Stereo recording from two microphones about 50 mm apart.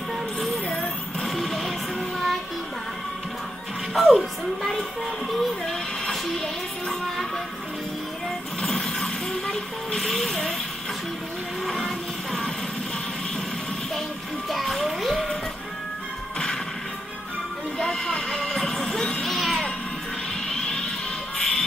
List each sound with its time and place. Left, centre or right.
1.2 s music: centre
3.9 s music: centre
8.6 s vehicle: centre
11.6 s music: centre
14.5 s children playing: centre
14.9 s music: centre
17.7 s music: centre
19.3 s music: centre
20.4 s music: centre